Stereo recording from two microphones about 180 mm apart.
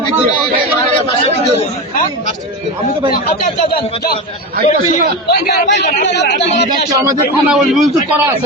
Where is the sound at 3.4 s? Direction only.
60° left (ahead or behind).